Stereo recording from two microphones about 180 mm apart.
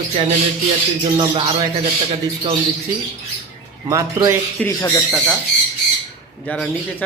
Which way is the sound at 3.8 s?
15° right (ahead or behind).